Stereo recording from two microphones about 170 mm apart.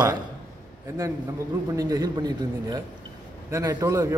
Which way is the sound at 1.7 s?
20° right (ahead or behind).